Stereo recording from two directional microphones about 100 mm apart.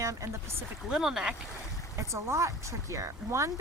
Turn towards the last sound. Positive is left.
turn(degrees=-30)  # may be behind; listen again after turning